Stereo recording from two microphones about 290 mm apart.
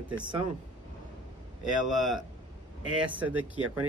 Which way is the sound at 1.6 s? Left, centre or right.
Centre.